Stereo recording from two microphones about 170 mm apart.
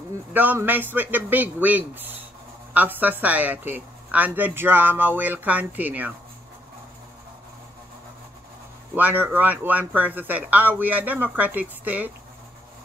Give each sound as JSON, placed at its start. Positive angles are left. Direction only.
{"t": 0.3, "sound": "a woman's voice", "side_deg": -10}
{"t": 8.9, "sound": "a woman's voice", "side_deg": -10}